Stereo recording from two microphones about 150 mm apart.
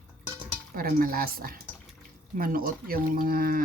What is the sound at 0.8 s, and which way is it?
Speech, 75° right (ahead or behind).